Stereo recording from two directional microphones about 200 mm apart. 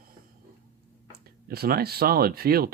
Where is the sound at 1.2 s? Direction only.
50° right (ahead or behind).